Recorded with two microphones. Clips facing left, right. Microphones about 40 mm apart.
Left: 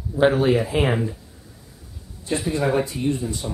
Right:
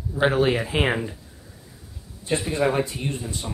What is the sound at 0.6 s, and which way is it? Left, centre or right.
Speech, centre.